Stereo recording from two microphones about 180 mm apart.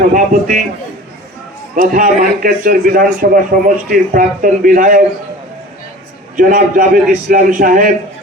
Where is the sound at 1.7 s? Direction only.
45° right (ahead or behind).